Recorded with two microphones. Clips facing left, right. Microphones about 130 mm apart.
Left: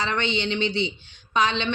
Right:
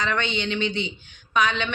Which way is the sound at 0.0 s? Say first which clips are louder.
Even; 30° left (ahead or behind).